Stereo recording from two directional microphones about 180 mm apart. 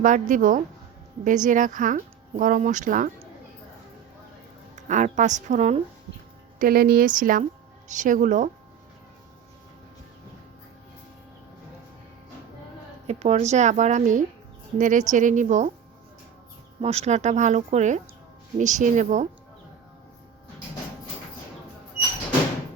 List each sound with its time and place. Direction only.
0.0 s speech: 45° right (ahead or behind)
4.7 s speech: 40° right (ahead or behind)
6.6 s speech: 55° right (ahead or behind)
13.1 s speech: 35° right (ahead or behind)
16.8 s speech: 35° right (ahead or behind)